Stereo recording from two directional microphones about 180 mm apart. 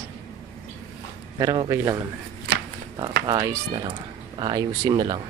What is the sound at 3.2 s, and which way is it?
Speech, 25° right (ahead or behind).